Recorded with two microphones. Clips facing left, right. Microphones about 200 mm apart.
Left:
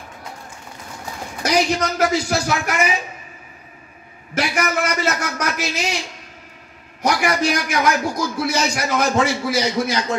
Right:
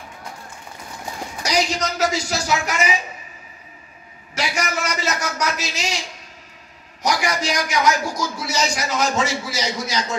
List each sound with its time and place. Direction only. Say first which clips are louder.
1.4 s a man's voice: left 3 dB; 55° left (ahead or behind)
4.4 s a sound: left 4 dB; 55° left (ahead or behind)
7.0 s a man's voice: left 3 dB; 55° left (ahead or behind)